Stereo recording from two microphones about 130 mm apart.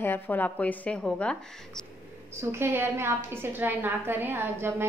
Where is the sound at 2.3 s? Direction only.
20° right (ahead or behind).